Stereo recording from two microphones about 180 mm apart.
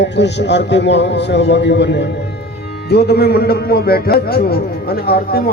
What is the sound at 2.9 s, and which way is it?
A man's voice, 60° left (ahead or behind).